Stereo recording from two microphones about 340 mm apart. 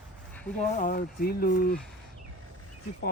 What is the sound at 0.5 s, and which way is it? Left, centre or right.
Speech, left.